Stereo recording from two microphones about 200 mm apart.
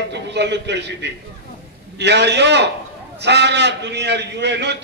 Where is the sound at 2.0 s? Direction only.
60° right (ahead or behind).